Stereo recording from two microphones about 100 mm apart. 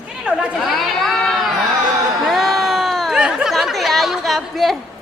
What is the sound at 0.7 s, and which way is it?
Speech, 5° left (ahead or behind).